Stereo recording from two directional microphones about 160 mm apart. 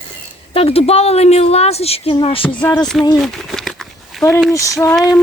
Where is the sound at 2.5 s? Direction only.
15° left (ahead or behind).